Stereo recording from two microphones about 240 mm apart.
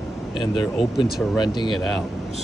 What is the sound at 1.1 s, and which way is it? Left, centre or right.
Speech, centre.